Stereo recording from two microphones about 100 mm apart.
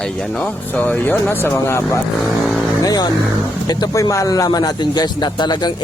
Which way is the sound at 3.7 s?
40° left (ahead or behind).